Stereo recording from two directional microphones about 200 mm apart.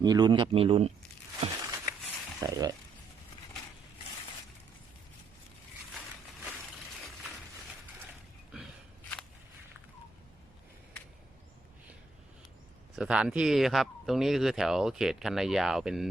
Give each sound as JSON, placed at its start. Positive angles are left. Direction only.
{"t": 0.0, "sound": "speech", "side_deg": -20}
{"t": 1.6, "sound": "a sound", "side_deg": -15}
{"t": 2.4, "sound": "speech", "side_deg": -20}
{"t": 13.0, "sound": "speech", "side_deg": -5}